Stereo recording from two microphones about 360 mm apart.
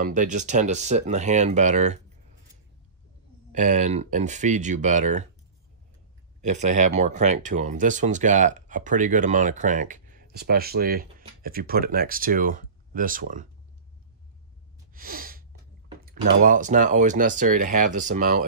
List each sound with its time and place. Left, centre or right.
0.0 s speech: right
3.5 s speech: centre
6.4 s speech: centre
15.0 s snort: right
16.0 s speech: right